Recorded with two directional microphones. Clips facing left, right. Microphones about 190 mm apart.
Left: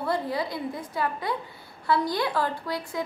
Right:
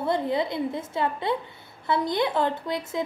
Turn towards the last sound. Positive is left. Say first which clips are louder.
# right 2 dB
turn(degrees=-20)  # may be behind; listen again after turning